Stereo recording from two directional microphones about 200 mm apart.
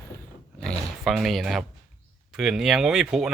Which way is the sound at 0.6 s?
Centre (ahead or behind).